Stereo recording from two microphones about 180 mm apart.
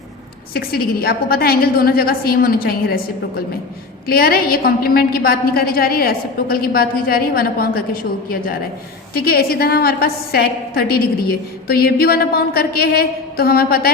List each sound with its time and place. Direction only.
0.5 s a woman's voice: 60° left (ahead or behind)
9.1 s a woman's voice: 55° left (ahead or behind)